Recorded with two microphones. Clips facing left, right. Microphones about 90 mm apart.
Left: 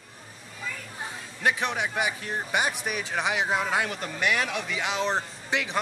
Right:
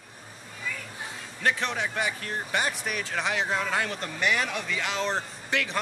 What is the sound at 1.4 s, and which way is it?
Speech, 15° left (ahead or behind).